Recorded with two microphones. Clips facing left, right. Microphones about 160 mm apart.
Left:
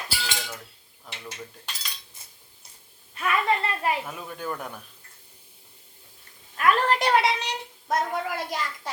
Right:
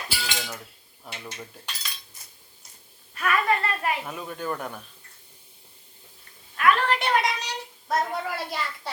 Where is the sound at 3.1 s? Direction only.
20° left (ahead or behind).